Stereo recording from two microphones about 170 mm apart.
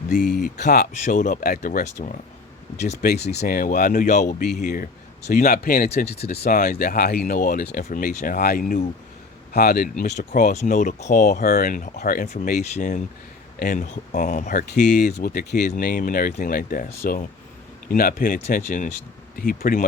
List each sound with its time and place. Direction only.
0.2 s speech: 5° left (ahead or behind)
1.0 s speech: 50° left (ahead or behind)
3.0 s speech: 70° left (ahead or behind)
3.4 s speech: 55° left (ahead or behind)
7.9 s speech: 50° left (ahead or behind)
9.5 s speech: 65° left (ahead or behind)
10.0 s speech: 50° left (ahead or behind)
14.8 s speech: 80° left
15.0 s speech: 60° left (ahead or behind)